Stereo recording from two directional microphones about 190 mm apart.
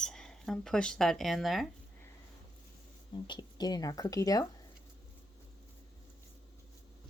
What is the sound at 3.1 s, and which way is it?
Speech, 25° left (ahead or behind).